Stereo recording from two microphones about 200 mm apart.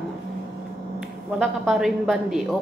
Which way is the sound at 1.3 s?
Centre (ahead or behind).